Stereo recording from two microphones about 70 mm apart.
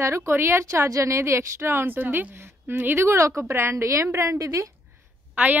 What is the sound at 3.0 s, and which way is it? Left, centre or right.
A woman's voice, right.